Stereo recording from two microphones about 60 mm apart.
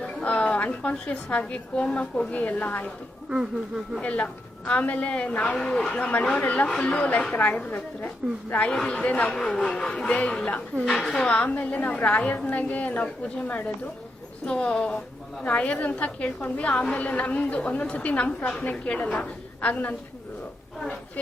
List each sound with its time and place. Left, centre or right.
0.0 s a woman's voice: centre
4.0 s a woman's voice: left
5.5 s a woman's voice: centre
8.2 s a woman's voice: centre
8.5 s a woman's voice: centre
11.3 s a woman's voice: left
14.4 s a woman's voice: centre